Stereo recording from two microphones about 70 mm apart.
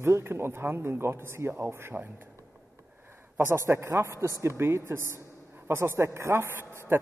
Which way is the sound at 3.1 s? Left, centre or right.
Right.